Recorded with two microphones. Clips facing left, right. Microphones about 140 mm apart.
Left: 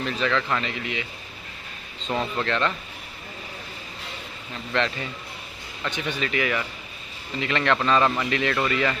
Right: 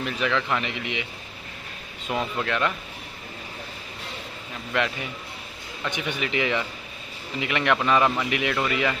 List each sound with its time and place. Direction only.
0.0 s a man's voice: 15° right (ahead or behind)
2.0 s a man's voice: 10° right (ahead or behind)
4.7 s a man's voice: 10° right (ahead or behind)